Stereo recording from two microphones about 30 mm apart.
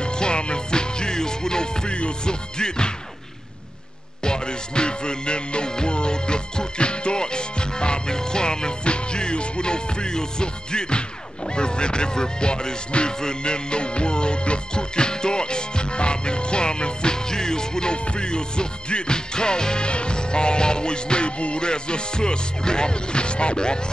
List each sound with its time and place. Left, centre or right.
0.0 s music: left
4.2 s music: left
11.5 s speech: left
17.9 s music: left